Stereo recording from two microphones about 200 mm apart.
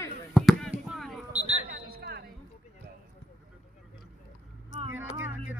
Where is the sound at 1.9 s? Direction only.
50° right (ahead or behind).